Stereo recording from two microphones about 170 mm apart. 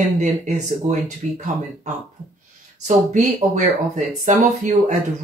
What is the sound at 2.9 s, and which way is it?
Speech, 45° right (ahead or behind).